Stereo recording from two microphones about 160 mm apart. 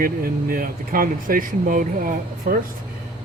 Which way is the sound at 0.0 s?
65° right (ahead or behind).